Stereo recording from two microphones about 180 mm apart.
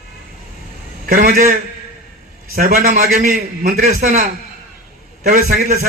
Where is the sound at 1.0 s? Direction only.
55° right (ahead or behind).